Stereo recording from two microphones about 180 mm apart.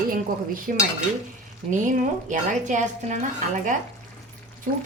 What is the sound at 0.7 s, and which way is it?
Speech, 50° right (ahead or behind).